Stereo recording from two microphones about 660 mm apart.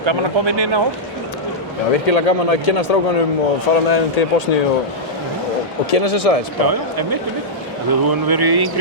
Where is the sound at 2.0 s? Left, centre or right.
Left.